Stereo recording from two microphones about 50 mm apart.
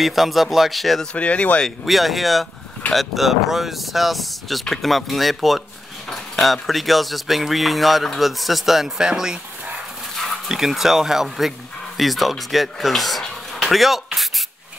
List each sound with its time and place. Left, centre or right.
0.0 s speech: centre
1.1 s speech: left
1.9 s speech: centre
10.5 s speech: centre